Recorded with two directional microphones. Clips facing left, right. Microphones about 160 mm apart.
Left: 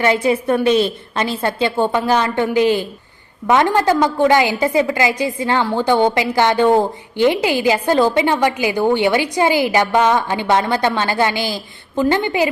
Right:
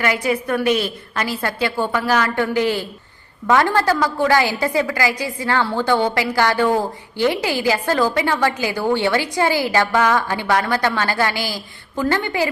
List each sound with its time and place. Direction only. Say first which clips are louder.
0.0 s a woman's voice: left 4 dB; 25° left (ahead or behind)